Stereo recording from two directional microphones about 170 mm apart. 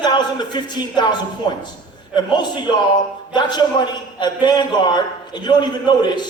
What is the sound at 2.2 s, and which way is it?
A man's voice, 25° left (ahead or behind).